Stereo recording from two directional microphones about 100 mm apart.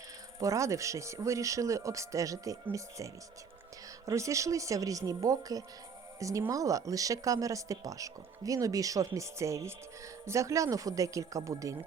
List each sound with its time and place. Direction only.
0.3 s speech: 30° right (ahead or behind)
4.0 s speech: 30° right (ahead or behind)